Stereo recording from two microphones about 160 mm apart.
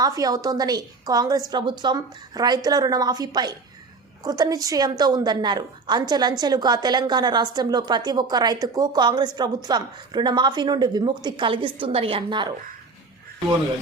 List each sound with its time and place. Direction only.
0.0 s a woman's voice: 25° right (ahead or behind)